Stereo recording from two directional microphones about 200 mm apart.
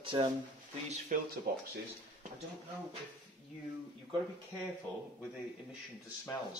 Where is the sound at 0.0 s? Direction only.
25° right (ahead or behind).